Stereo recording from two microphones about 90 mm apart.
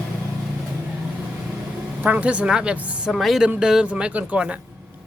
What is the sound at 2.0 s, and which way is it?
A woman's voice, 15° right (ahead or behind).